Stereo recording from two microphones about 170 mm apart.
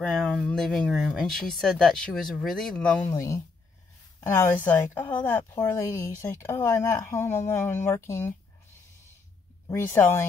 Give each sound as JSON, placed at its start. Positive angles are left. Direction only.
{"t": 0.0, "sound": "speech", "side_deg": 5}
{"t": 3.1, "sound": "speech", "side_deg": 20}
{"t": 5.4, "sound": "speech", "side_deg": 20}
{"t": 9.7, "sound": "speech", "side_deg": 15}